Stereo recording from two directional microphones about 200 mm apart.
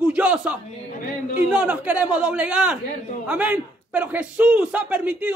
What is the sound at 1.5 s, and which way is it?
A man's voice, 5° right (ahead or behind).